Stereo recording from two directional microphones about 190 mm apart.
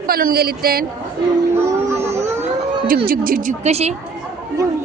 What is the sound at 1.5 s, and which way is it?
Music, 15° right (ahead or behind).